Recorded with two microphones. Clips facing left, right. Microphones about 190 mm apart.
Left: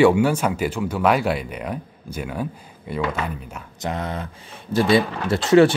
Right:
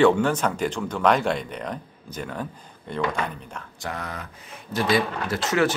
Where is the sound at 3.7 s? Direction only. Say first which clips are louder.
Left 7 dB; 20° left (ahead or behind).